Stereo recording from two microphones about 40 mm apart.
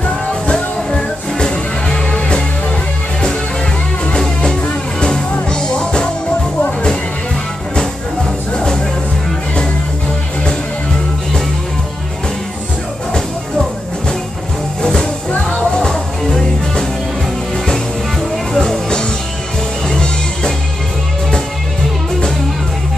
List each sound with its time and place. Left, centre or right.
0.0 s music: left
5.5 s music: left
7.7 s music: centre
14.8 s music: centre
18.3 s music: centre
18.9 s music: centre